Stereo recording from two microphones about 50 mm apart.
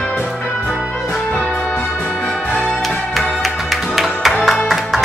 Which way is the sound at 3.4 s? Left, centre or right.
Centre.